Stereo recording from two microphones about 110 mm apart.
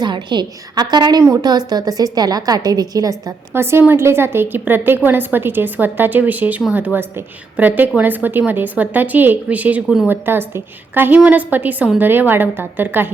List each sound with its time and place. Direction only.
0.0 s a woman's voice: 45° right (ahead or behind)
3.5 s a woman's voice: 20° right (ahead or behind)
10.1 s a woman's voice: 20° right (ahead or behind)